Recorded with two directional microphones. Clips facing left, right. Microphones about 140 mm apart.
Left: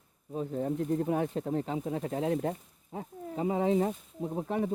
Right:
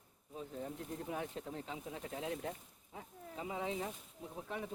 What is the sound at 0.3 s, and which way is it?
Speech, 50° left (ahead or behind).